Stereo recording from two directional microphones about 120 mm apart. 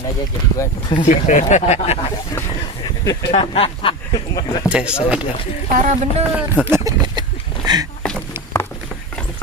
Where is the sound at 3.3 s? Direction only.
55° left (ahead or behind).